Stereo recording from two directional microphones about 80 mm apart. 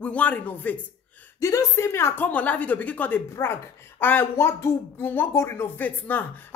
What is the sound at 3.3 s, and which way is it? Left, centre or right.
Speech, left.